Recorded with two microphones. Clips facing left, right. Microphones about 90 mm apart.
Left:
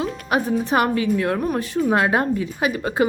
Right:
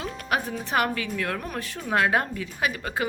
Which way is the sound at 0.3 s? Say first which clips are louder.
Left 7 dB; 20° left (ahead or behind).